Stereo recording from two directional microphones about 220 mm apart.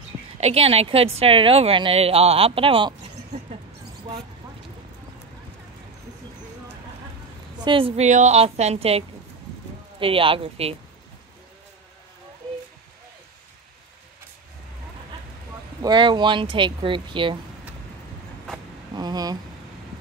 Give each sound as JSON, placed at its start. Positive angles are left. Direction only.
{"t": 0.4, "sound": "a woman's voice", "side_deg": -30}
{"t": 7.6, "sound": "a woman's voice", "side_deg": -25}
{"t": 15.8, "sound": "a woman's voice", "side_deg": -20}
{"t": 18.9, "sound": "speech", "side_deg": -20}